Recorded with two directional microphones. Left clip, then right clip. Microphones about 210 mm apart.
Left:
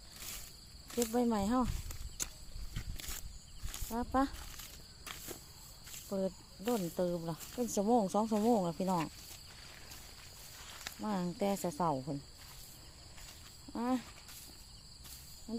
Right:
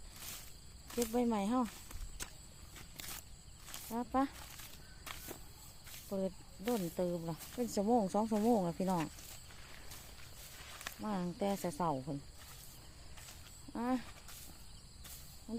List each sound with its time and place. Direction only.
0.9 s speech: 5° left (ahead or behind)
1.9 s walk: 20° left (ahead or behind)
3.7 s speech: 5° left (ahead or behind)
4.4 s a sound: centre (ahead or behind)
5.1 s walk: centre (ahead or behind)
5.9 s speech: 5° left (ahead or behind)
11.0 s speech: 15° left (ahead or behind)
13.7 s speech: 10° left (ahead or behind)
15.5 s a sound: 5° left (ahead or behind)